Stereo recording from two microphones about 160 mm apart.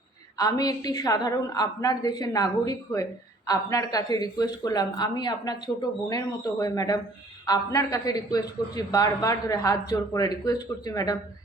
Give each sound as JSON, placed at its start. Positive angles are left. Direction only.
{"t": 0.3, "sound": "a woman's voice", "side_deg": 25}